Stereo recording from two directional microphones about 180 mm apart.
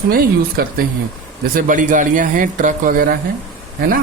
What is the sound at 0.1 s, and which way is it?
Speech, 55° right (ahead or behind).